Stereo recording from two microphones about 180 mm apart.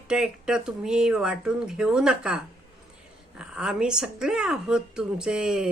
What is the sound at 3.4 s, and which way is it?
Speech, 5° right (ahead or behind).